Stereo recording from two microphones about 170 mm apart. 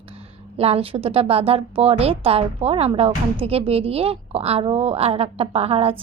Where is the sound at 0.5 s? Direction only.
35° right (ahead or behind).